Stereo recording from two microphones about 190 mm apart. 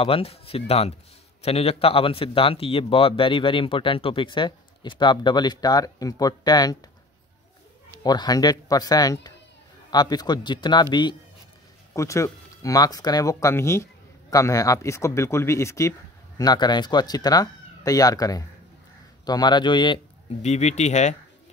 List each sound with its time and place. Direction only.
0.0 s speech: 30° left (ahead or behind)
8.0 s speech: 20° left (ahead or behind)
20.4 s speech: 35° left (ahead or behind)